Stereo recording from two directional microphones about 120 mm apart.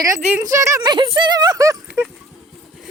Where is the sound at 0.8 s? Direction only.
35° right (ahead or behind).